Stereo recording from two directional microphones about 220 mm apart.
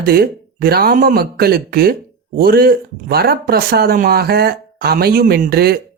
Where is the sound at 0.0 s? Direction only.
45° right (ahead or behind).